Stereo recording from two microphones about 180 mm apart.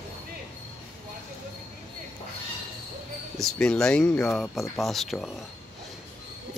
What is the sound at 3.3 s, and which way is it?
Speech, 5° left (ahead or behind).